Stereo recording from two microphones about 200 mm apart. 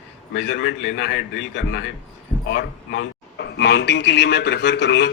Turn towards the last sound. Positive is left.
turn(degrees=60)  # may be behind; listen again after turning